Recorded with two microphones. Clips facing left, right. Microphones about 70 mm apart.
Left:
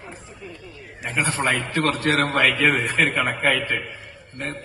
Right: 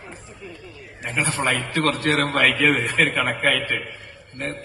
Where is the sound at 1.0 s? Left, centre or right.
Left.